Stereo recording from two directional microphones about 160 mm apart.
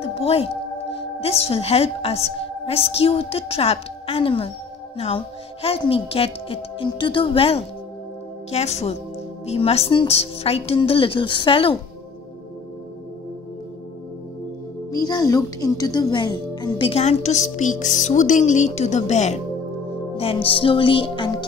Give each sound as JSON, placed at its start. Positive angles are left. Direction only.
{"t": 0.0, "sound": "a woman's voice", "side_deg": 40}
{"t": 14.9, "sound": "speech", "side_deg": 25}